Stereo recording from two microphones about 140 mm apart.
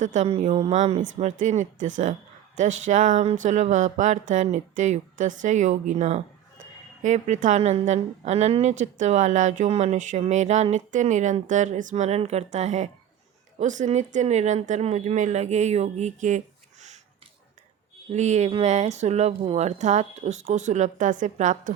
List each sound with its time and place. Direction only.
0.0 s a woman's voice: 60° right (ahead or behind)
18.1 s a woman's voice: 55° right (ahead or behind)